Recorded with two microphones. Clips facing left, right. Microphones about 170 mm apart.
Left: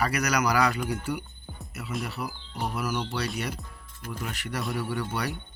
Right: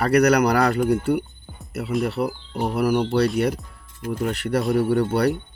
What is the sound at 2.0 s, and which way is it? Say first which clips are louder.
Speech: right 11 dB; 60° right (ahead or behind).